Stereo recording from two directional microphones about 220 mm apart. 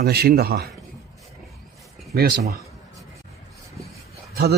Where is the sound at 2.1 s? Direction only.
45° right (ahead or behind).